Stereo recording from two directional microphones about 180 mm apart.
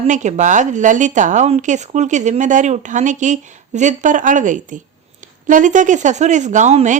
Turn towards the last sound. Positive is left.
turn(degrees=-40)  # may be behind; listen again after turning